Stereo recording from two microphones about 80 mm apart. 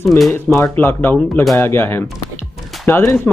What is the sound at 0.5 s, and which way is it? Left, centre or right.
Speech, left.